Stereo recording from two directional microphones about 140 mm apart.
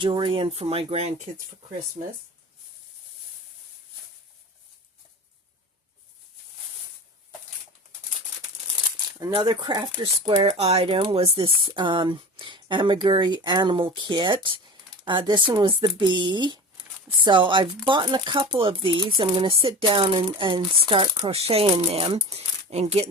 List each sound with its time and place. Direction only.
0.0 s speech: 35° right (ahead or behind)
9.3 s speech: 35° right (ahead or behind)